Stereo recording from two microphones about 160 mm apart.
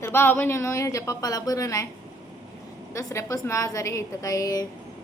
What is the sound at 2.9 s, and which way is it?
A woman's voice, 20° left (ahead or behind).